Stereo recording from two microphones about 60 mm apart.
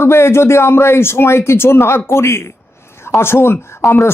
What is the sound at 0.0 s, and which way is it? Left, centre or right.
Speech, left.